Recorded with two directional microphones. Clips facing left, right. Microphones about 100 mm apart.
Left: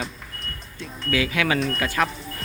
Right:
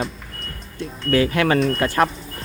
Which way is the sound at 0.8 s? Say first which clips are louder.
Right 6 dB; 45° right (ahead or behind).